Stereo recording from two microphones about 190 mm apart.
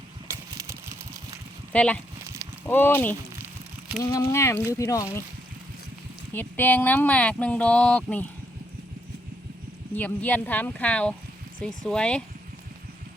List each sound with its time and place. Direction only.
0.3 s a sound: 15° right (ahead or behind)
1.7 s speech: 5° left (ahead or behind)
6.3 s speech: 10° left (ahead or behind)
9.9 s speech: 10° left (ahead or behind)